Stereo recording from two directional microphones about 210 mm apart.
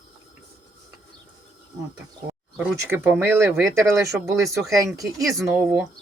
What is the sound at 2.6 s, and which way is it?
Speech, 10° right (ahead or behind).